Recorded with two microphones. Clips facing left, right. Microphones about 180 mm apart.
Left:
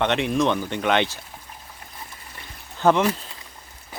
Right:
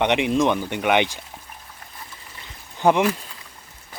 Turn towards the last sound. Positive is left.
turn(degrees=-15)  # may be behind; listen again after turning